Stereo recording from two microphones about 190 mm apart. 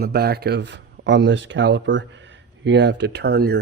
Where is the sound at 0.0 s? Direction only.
55° right (ahead or behind).